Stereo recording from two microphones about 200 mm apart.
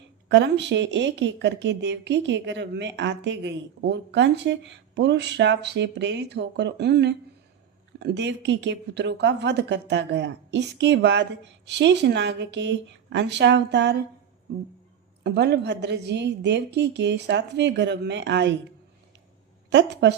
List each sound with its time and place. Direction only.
0.3 s speech: 60° right (ahead or behind)
15.2 s speech: 60° right (ahead or behind)
19.7 s speech: 60° right (ahead or behind)